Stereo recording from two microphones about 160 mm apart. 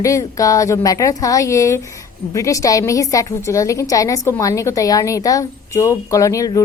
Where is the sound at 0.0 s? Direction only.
20° left (ahead or behind).